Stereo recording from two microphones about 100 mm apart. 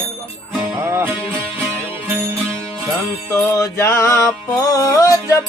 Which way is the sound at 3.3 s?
30° left (ahead or behind).